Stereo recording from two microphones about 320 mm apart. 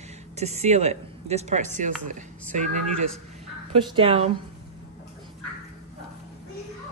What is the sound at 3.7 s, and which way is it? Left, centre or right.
Speech, centre.